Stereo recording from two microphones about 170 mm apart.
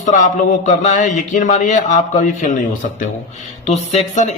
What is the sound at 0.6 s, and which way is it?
Speech, 45° left (ahead or behind).